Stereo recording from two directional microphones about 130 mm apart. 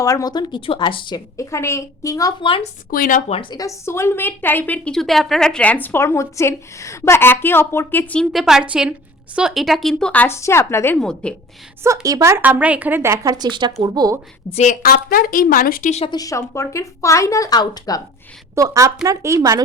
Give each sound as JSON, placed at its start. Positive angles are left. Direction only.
{"t": 0.0, "sound": "speech", "side_deg": 25}
{"t": 1.4, "sound": "a woman's voice", "side_deg": 20}
{"t": 2.9, "sound": "a woman's voice", "side_deg": 90}
{"t": 3.5, "sound": "speech", "side_deg": 25}
{"t": 4.9, "sound": "speech", "side_deg": 0}
{"t": 8.3, "sound": "a woman's voice", "side_deg": 0}
{"t": 11.0, "sound": "speech", "side_deg": 5}
{"t": 11.8, "sound": "a woman's voice", "side_deg": -25}
{"t": 14.5, "sound": "a woman's voice", "side_deg": 70}
{"t": 16.0, "sound": "a woman's voice", "side_deg": 30}
{"t": 18.5, "sound": "speech", "side_deg": -25}